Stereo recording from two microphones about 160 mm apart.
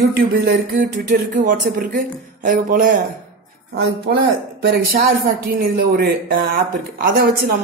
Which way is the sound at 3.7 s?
85° right.